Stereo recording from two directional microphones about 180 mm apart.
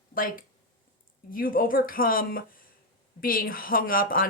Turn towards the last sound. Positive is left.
turn(degrees=50)  # may be behind; listen again after turning